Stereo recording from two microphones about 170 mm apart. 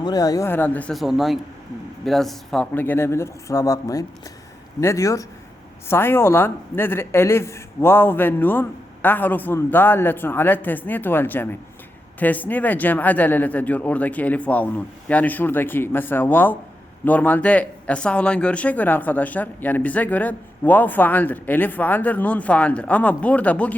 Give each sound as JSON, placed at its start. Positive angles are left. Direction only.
{"t": 0.0, "sound": "speech", "side_deg": 20}